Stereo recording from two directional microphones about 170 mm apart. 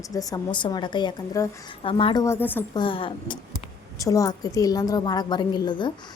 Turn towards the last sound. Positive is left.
turn(degrees=25)  # may be behind; listen again after turning